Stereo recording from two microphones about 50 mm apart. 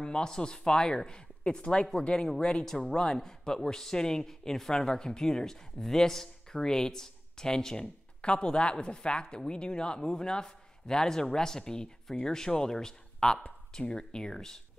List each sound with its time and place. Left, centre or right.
0.0 s a man's voice: centre